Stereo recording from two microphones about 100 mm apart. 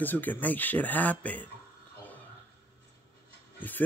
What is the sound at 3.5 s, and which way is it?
Speech, 20° left (ahead or behind).